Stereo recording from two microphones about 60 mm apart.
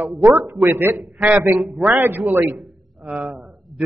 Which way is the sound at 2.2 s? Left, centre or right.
Right.